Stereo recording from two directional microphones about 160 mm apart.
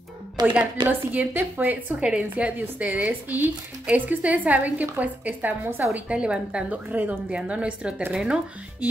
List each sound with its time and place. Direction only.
0.4 s a woman's voice: 25° right (ahead or behind)
0.8 s a woman's voice: 10° right (ahead or behind)